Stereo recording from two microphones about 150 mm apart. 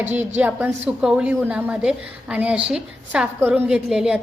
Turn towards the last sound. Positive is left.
turn(degrees=-5)  # may be behind; listen again after turning